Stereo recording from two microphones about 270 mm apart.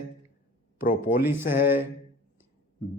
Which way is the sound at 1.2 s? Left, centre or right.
Centre.